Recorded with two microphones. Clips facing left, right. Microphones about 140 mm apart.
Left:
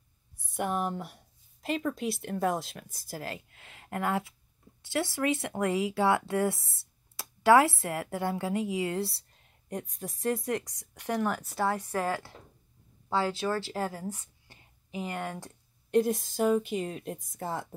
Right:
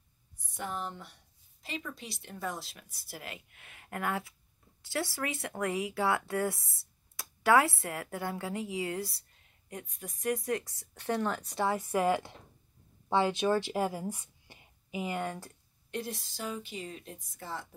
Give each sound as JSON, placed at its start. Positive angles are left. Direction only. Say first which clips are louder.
{"t": 0.6, "sound": "speech", "louder": "left 7 dB", "side_deg": 55}
{"t": 2.7, "sound": "a woman's voice", "louder": "left 6 dB", "side_deg": 45}
{"t": 3.3, "sound": "speech", "louder": "left 5 dB", "side_deg": 25}
{"t": 9.8, "sound": "a woman's voice", "louder": "left 1 dB", "side_deg": 35}
{"t": 11.9, "sound": "speech", "louder": "right 3 dB", "side_deg": -15}
{"t": 15.2, "sound": "speech", "louder": "even", "side_deg": 10}
{"t": 15.9, "sound": "a woman's voice", "louder": "left 12 dB", "side_deg": 50}